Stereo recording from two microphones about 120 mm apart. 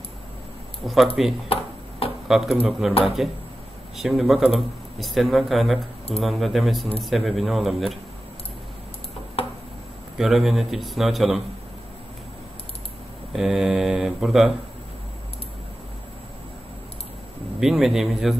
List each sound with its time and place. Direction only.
0.8 s speech: centre (ahead or behind)
1.5 s a sound: 50° left (ahead or behind)
2.2 s speech: 5° right (ahead or behind)
9.4 s tick-tock: 50° left (ahead or behind)
10.1 s speech: 5° right (ahead or behind)
13.3 s speech: 5° right (ahead or behind)
17.6 s speech: 5° right (ahead or behind)